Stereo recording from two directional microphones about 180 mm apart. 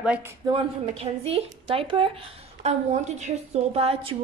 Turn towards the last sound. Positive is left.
turn(degrees=-30)  # may be behind; listen again after turning